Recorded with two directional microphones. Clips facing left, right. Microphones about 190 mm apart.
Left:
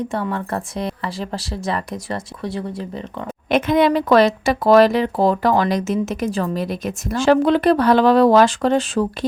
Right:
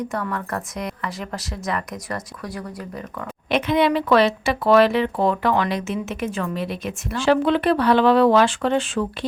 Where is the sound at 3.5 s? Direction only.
45° left (ahead or behind).